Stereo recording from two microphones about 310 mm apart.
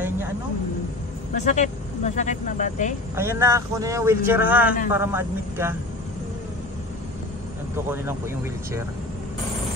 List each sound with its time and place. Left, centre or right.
1.3 s speech: left
3.2 s speech: centre
7.7 s speech: centre